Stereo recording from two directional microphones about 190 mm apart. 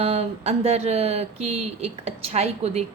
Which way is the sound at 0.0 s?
35° right (ahead or behind).